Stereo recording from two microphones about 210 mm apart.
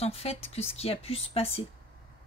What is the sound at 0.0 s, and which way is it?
A woman's voice, 30° left (ahead or behind).